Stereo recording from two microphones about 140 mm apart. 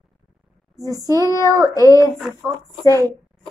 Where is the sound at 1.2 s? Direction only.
20° left (ahead or behind).